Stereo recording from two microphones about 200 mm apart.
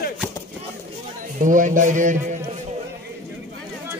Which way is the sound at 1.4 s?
40° right (ahead or behind).